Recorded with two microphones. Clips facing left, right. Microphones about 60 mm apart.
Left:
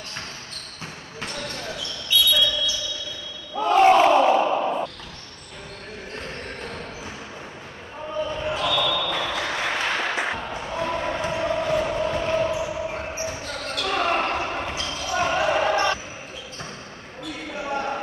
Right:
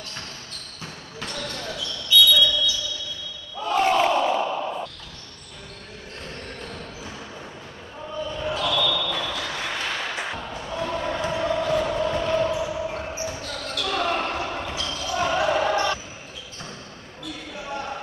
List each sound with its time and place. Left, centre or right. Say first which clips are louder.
1.2 s basketball bounce: even; centre
2.3 s a sound: right 2 dB; left
3.5 s battle cry: left 5 dB; left
6.2 s basketball bounce: even; left
8.2 s basketball bounce: left 1 dB; left
17.5 s basketball bounce: left 5 dB; left